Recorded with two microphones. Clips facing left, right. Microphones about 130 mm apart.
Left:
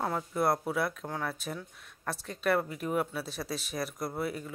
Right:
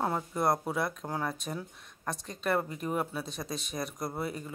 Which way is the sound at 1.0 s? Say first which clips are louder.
Right 1 dB; 10° right (ahead or behind).